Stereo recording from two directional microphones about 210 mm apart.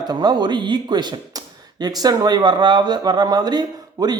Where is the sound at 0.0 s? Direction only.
20° right (ahead or behind).